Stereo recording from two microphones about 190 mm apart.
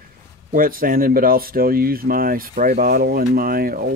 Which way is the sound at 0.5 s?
45° right (ahead or behind).